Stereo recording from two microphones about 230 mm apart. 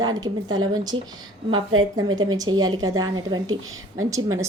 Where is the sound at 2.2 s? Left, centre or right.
Centre.